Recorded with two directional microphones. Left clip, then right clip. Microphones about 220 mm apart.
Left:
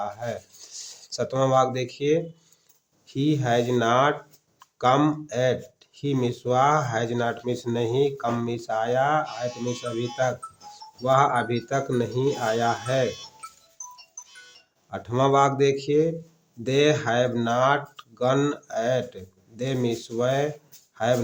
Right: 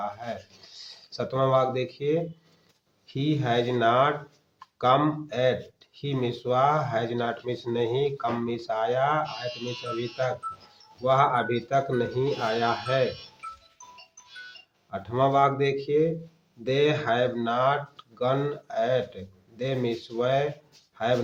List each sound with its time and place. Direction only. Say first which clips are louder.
0.0 s speech: left 2 dB; 35° left (ahead or behind)
11.0 s speech: left 1 dB; 30° left (ahead or behind)
14.8 s speech: left 2 dB; 35° left (ahead or behind)